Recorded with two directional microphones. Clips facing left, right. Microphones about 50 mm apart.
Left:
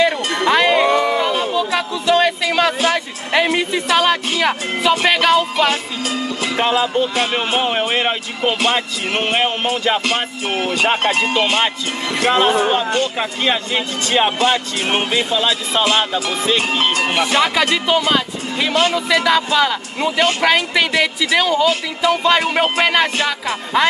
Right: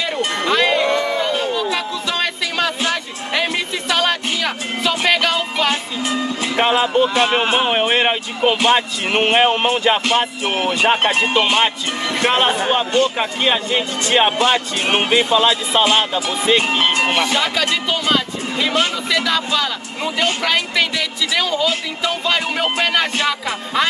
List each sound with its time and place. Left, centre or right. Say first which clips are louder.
0.5 s a sound: left 3 dB; centre
2.8 s music: left 3 dB; centre
3.5 s speech: left 4 dB; centre
5.7 s speech: even; right
7.9 s speech: right 2 dB; centre
10.6 s speech: right 1 dB; right
13.2 s speech: right 1 dB; centre
17.6 s speech: left 4 dB; centre
18.7 s speech: left 3 dB; centre
19.1 s speech: left 4 dB; centre
20.9 s speech: left 5 dB; left
21.4 s speech: left 3 dB; centre